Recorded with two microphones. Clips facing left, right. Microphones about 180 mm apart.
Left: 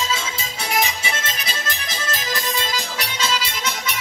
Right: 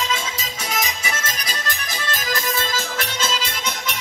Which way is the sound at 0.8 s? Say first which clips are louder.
Left 4 dB; 25° left (ahead or behind).